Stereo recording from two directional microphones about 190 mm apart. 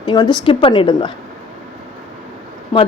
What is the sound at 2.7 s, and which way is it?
Speech, 25° left (ahead or behind).